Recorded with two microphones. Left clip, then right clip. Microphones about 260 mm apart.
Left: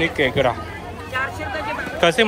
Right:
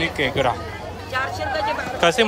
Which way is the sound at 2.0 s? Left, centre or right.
Centre.